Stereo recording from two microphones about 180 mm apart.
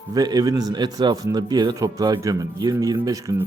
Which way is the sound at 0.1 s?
20° right (ahead or behind).